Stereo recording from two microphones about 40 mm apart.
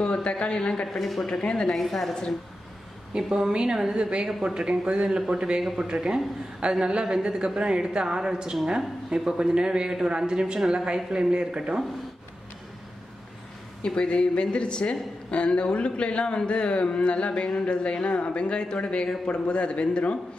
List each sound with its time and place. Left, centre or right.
0.0 s a woman's voice: left
0.8 s a woman's voice: centre
3.1 s a man's voice: centre
6.9 s a woman's voice: right
13.8 s speech: left